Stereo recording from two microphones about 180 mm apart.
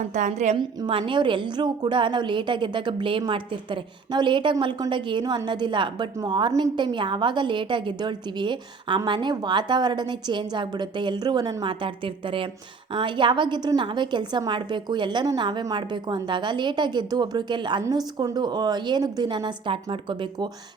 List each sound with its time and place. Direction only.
0.1 s a woman's voice: 40° right (ahead or behind)
0.8 s a woman's voice: 30° right (ahead or behind)